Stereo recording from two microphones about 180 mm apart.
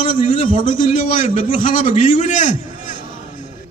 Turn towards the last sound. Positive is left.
turn(degrees=45)  # may be behind; listen again after turning